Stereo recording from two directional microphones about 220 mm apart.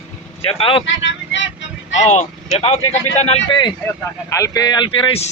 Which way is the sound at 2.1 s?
30° left (ahead or behind).